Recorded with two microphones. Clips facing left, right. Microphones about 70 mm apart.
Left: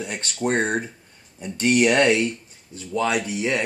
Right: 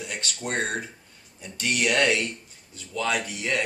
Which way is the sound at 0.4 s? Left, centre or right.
Left.